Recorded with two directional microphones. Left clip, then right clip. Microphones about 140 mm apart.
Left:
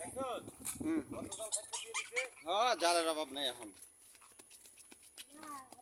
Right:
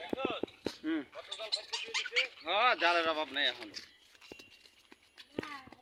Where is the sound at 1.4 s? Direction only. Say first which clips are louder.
Right 11 dB; 35° left (ahead or behind).